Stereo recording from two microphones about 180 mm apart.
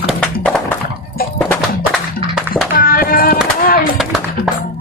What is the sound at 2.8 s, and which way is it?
Child singing, 55° left (ahead or behind).